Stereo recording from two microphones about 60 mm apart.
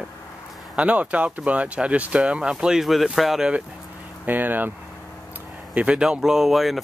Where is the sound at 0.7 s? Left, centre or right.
Right; by 3.4 s centre.